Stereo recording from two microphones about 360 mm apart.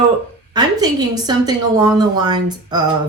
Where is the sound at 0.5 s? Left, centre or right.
Centre.